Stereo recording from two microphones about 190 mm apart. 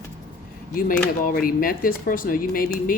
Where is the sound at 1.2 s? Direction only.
50° left (ahead or behind).